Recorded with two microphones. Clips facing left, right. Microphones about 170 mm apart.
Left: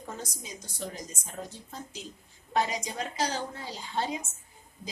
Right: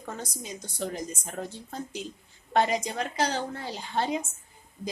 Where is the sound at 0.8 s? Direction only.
65° right (ahead or behind).